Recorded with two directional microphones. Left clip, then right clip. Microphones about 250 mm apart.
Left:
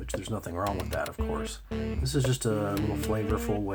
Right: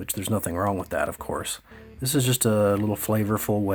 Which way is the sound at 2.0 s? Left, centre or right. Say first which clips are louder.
Right 7 dB; right.